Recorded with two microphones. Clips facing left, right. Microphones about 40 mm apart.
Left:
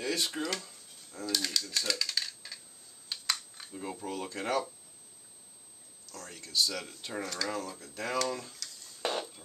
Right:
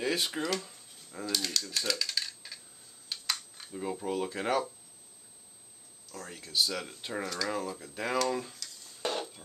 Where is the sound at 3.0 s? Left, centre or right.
Centre.